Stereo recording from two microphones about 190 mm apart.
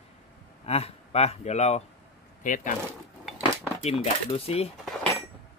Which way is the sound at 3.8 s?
35° left (ahead or behind).